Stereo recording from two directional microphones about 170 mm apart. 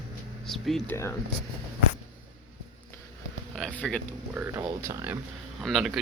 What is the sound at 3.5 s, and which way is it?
Speech, 5° left (ahead or behind).